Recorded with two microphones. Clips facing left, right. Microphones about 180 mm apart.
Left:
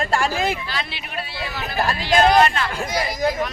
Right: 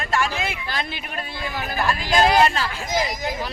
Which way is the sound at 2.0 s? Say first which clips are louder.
Left 2 dB; 35° right (ahead or behind).